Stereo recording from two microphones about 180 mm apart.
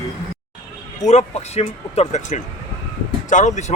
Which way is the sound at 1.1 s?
35° left (ahead or behind).